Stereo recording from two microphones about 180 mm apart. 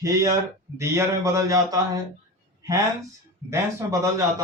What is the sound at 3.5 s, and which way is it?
Speech, 15° right (ahead or behind).